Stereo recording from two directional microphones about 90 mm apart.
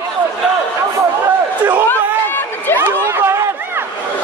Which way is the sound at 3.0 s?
25° right (ahead or behind).